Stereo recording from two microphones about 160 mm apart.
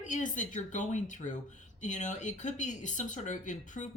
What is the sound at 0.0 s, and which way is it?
Speech, 50° left (ahead or behind).